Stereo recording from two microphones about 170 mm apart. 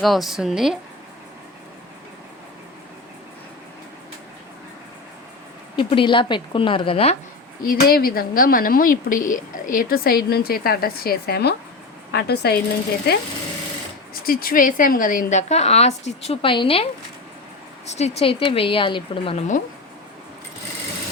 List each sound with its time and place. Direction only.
0.0 s a woman's voice: centre (ahead or behind)
5.7 s a woman's voice: 30° left (ahead or behind)
7.7 s speech: 60° left (ahead or behind)
14.1 s a woman's voice: 60° left (ahead or behind); by 19.5 s 30° left (ahead or behind)